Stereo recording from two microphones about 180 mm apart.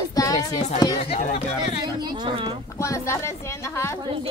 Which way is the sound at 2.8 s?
15° left (ahead or behind).